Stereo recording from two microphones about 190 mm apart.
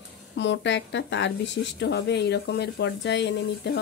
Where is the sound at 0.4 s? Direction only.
70° left (ahead or behind).